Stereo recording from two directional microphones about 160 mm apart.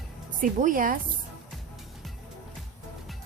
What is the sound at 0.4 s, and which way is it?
Speech, 55° right (ahead or behind).